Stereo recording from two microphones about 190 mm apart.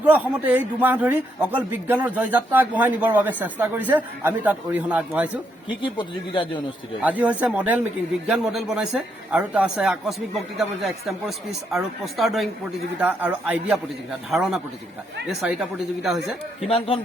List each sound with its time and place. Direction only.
0.1 s a man's voice: 10° right (ahead or behind)
5.8 s speech: 25° left (ahead or behind)
7.0 s a man's voice: 10° right (ahead or behind)
16.6 s speech: 30° left (ahead or behind)